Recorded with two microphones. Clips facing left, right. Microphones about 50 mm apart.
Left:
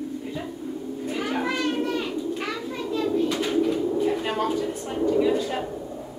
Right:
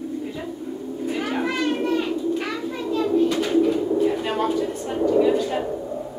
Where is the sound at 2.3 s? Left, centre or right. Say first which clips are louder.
Right 3 dB; centre.